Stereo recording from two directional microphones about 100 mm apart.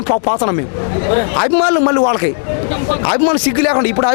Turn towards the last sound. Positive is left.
turn(degrees=20)  # may be behind; listen again after turning